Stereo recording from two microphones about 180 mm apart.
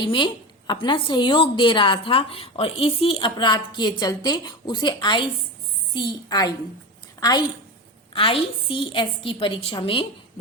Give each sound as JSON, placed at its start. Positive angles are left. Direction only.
{"t": 0.0, "sound": "a woman's voice", "side_deg": 25}